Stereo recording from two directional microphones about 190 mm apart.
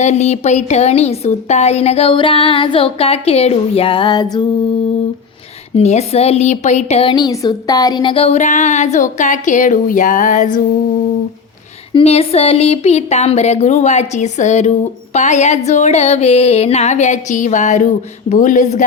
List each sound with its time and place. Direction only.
0.0 s a woman's voice: 35° left (ahead or behind)
5.7 s a woman's voice: 35° left (ahead or behind)
11.9 s a woman's voice: 30° left (ahead or behind)